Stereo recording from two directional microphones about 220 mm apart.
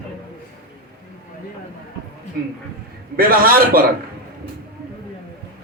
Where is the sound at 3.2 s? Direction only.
40° right (ahead or behind).